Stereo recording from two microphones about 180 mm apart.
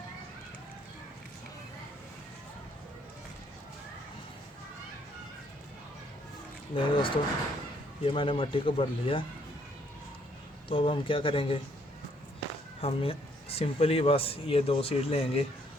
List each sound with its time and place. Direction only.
6.7 s speech: 30° left (ahead or behind)
10.7 s speech: 30° left (ahead or behind)
12.8 s speech: 30° left (ahead or behind)